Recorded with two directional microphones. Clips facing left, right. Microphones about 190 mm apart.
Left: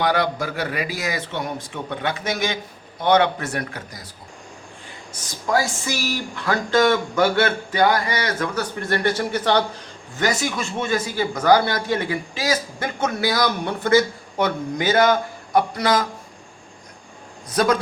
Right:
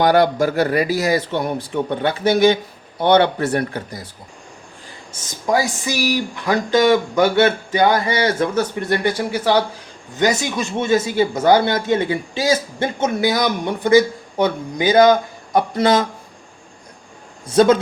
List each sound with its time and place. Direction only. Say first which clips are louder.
0.0 s a man's voice: right 7 dB; 45° right (ahead or behind); by 4.1 s 30° right (ahead or behind)
5.5 s speech: right 3 dB; 15° right (ahead or behind)
8.9 s speech: right 2 dB; 15° right (ahead or behind)
10.2 s speech: right 4 dB; 20° right (ahead or behind)
17.5 s speech: right 7 dB; 25° right (ahead or behind)